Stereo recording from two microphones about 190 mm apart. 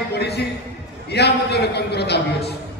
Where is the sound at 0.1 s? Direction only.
60° left (ahead or behind).